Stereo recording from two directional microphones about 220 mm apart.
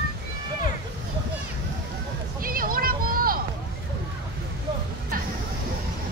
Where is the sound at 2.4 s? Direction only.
40° right (ahead or behind).